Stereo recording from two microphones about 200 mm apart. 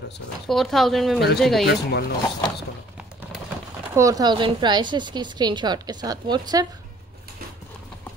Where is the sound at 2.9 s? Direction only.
5° right (ahead or behind).